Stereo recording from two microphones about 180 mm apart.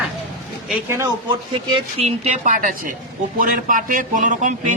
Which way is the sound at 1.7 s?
35° right (ahead or behind).